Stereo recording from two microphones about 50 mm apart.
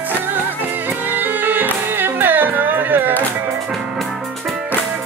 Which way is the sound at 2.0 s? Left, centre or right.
Right.